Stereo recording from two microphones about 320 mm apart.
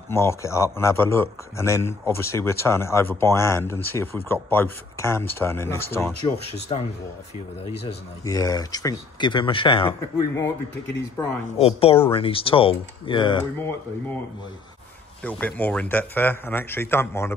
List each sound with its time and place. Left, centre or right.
0.1 s speech: centre
7.8 s speech: centre
11.1 s speech: centre
15.2 s a man's voice: centre